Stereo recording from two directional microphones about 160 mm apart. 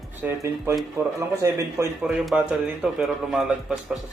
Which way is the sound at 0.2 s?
15° right (ahead or behind).